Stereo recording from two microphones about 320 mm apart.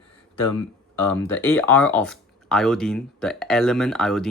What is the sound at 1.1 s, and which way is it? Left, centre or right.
Speech, centre.